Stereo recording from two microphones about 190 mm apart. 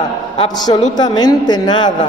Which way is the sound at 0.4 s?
20° left (ahead or behind).